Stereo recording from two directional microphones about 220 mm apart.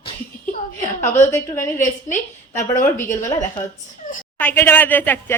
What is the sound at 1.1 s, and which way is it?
Speech, 10° left (ahead or behind).